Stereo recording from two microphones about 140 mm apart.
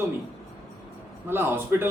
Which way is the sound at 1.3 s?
15° right (ahead or behind).